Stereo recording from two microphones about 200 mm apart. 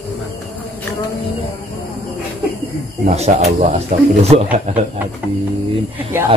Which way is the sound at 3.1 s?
35° right (ahead or behind).